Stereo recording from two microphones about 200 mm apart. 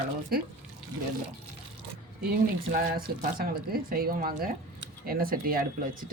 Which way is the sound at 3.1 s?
50° right (ahead or behind).